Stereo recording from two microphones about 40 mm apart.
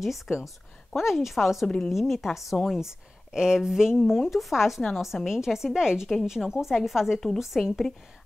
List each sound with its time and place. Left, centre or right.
0.0 s a woman's voice: centre
4.2 s a woman's voice: centre